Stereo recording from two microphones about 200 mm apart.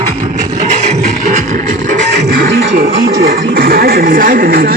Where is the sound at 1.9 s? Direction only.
45° right (ahead or behind).